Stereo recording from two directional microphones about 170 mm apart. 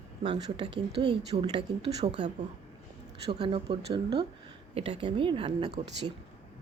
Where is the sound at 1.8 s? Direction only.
40° right (ahead or behind).